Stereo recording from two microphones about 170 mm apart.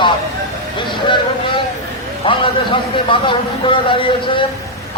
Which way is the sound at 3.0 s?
30° left (ahead or behind).